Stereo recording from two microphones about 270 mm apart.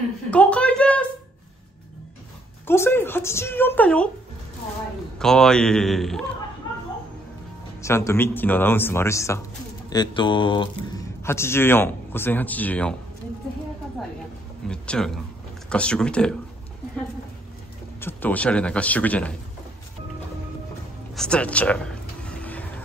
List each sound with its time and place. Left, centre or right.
0.3 s a sound: centre
2.6 s a man's voice: centre
5.2 s a man's voice: centre
7.8 s a man's voice: centre
14.7 s a man's voice: centre
18.0 s a man's voice: centre
21.1 s a sound: centre